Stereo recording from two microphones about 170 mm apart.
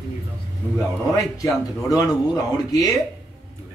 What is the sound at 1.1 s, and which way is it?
Speech, 20° left (ahead or behind).